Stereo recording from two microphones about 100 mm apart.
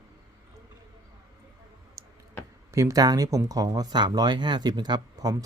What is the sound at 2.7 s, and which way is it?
Speech, 35° right (ahead or behind).